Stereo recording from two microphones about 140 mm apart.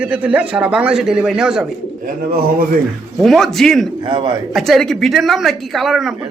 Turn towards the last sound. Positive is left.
turn(degrees=0)  # may be behind; listen again after turning